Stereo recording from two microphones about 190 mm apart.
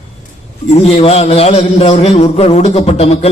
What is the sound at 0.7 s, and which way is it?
A man's voice, 30° left (ahead or behind).